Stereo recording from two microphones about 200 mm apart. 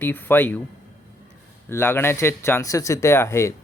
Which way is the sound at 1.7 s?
10° left (ahead or behind).